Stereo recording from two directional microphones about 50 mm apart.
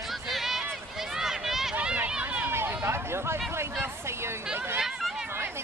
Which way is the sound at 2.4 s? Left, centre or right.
Right.